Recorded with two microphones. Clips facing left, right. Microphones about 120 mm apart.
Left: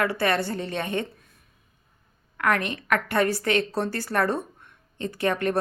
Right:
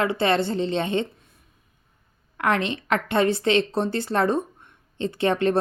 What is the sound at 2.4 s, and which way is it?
A woman's voice, 25° right (ahead or behind).